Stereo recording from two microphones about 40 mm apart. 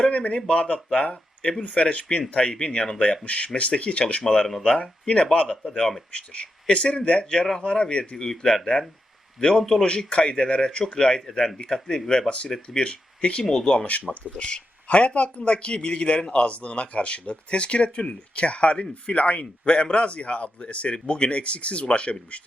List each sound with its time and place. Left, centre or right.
0.0 s speech: left
2.3 s speech: left
4.3 s speech: centre
4.6 s speech: left
12.6 s speech: left
13.4 s speech: centre
14.3 s speech: left